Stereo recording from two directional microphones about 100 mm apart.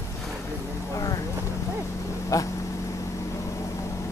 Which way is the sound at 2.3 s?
35° left (ahead or behind).